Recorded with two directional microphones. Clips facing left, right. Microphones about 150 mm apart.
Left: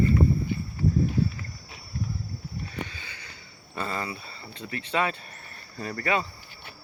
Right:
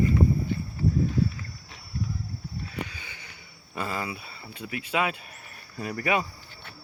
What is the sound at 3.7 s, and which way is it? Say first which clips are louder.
Speech: even; 5° right (ahead or behind).